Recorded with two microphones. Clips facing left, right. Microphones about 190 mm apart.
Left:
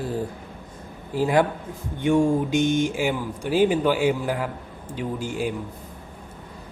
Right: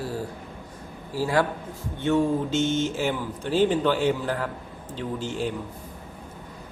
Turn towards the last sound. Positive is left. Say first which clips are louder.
# left 2 dB
turn(degrees=10)  # may be behind; listen again after turning